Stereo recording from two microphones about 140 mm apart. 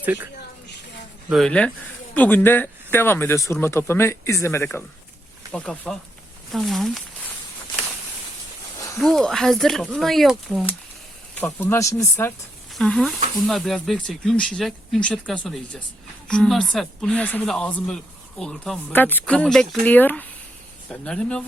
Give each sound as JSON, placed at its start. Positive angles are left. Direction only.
{"t": 0.0, "sound": "speech", "side_deg": -10}
{"t": 1.3, "sound": "speech", "side_deg": 5}
{"t": 5.5, "sound": "speech", "side_deg": 10}
{"t": 9.0, "sound": "speech", "side_deg": 5}
{"t": 11.3, "sound": "speech", "side_deg": 15}
{"t": 12.7, "sound": "speech", "side_deg": 5}